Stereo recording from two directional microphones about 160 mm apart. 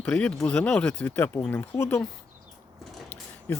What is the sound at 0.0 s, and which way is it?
Speech, 10° left (ahead or behind).